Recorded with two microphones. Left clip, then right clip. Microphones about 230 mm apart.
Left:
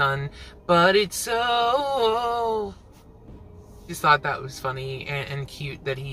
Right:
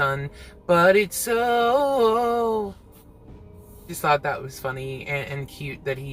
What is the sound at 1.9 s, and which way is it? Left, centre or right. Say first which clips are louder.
Speech: right 2 dB; centre.